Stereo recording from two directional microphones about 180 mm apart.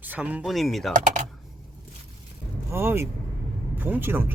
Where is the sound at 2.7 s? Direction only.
15° right (ahead or behind).